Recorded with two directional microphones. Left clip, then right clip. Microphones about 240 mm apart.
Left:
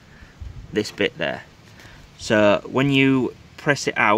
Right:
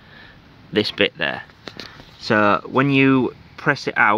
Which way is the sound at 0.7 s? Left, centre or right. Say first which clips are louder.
Right 4 dB; centre.